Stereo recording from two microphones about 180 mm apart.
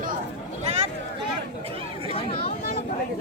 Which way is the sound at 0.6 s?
35° right (ahead or behind).